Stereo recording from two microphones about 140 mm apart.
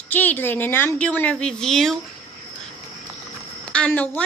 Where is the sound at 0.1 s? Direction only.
15° left (ahead or behind).